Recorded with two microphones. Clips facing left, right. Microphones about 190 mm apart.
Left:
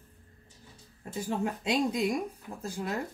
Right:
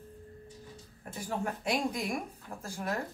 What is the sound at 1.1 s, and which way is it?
Speech, 25° left (ahead or behind).